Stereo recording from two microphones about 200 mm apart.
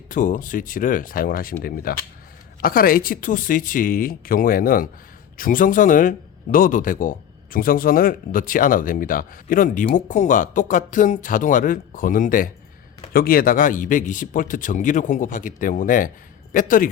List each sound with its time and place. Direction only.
0.1 s speech: 40° left (ahead or behind)